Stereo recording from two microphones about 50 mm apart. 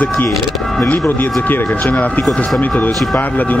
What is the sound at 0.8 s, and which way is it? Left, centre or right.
Speech, left.